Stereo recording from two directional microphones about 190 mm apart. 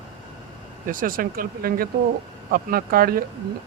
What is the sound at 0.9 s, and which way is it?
Speech, 45° right (ahead or behind).